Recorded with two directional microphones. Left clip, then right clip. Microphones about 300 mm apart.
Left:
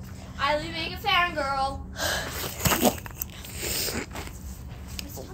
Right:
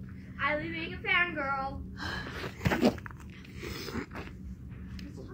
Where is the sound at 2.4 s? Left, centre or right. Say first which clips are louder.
Left 4 dB; centre.